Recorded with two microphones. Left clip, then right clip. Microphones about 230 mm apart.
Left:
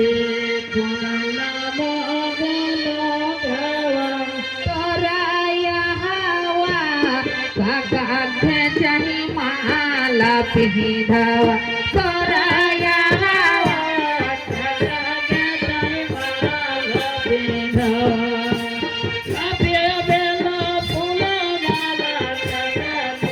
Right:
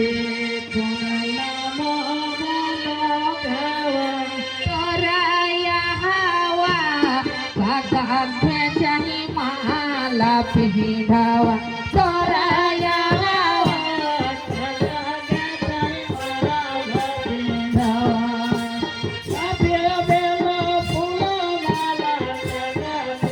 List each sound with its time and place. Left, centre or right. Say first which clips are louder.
8.4 s music: left 5 dB; right
9.6 s a sound: left 4 dB; right
11.1 s music: left 1 dB; right